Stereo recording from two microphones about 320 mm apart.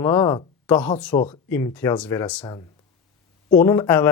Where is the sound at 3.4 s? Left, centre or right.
Centre.